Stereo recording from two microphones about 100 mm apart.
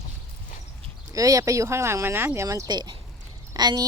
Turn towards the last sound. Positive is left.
turn(degrees=-40)  # may be behind; listen again after turning